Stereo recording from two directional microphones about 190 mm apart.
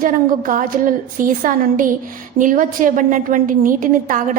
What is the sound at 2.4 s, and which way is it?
A woman's voice, 45° right (ahead or behind).